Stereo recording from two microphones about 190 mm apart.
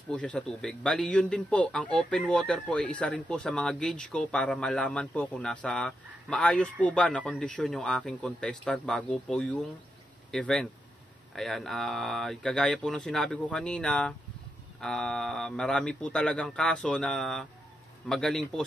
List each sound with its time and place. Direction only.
0.1 s speech: 5° left (ahead or behind)